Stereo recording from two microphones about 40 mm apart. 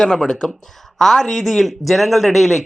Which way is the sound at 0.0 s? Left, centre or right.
Centre.